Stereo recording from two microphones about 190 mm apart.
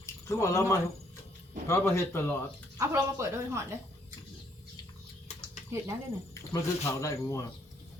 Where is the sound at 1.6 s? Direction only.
15° left (ahead or behind).